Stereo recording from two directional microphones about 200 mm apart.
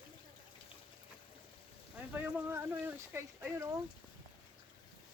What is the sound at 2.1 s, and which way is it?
Speech, 10° right (ahead or behind).